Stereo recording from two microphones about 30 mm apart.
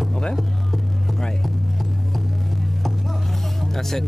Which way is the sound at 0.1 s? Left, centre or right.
Left.